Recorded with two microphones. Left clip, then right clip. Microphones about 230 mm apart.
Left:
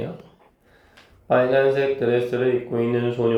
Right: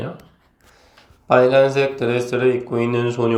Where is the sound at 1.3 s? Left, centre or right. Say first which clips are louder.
Right 4 dB; right.